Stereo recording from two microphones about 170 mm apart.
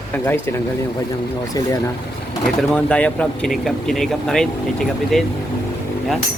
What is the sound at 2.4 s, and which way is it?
Speech, 5° left (ahead or behind).